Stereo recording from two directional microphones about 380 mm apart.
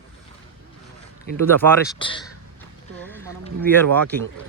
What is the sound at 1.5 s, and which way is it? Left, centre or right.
Speech, centre.